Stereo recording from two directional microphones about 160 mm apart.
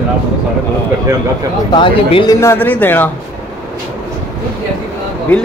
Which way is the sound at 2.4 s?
15° left (ahead or behind).